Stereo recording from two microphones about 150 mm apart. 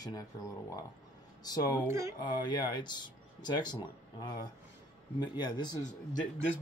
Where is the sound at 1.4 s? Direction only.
25° left (ahead or behind).